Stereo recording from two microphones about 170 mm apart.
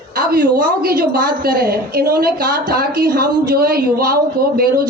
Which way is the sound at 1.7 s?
60° right (ahead or behind).